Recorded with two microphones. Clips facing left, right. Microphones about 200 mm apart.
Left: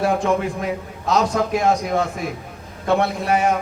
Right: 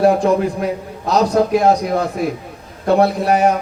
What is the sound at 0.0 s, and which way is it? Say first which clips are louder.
A man's voice: right 6 dB; 35° right (ahead or behind).